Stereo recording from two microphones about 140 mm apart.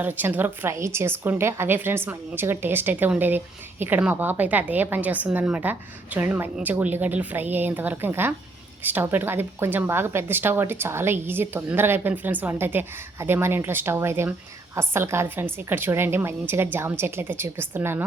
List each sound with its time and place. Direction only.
0.0 s a woman's voice: 15° right (ahead or behind)